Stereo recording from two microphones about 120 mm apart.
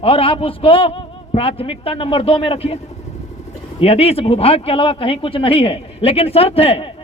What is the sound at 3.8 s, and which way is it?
Speech, 55° left (ahead or behind).